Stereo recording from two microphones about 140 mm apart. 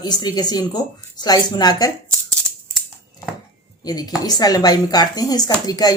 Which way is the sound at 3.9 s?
30° left (ahead or behind).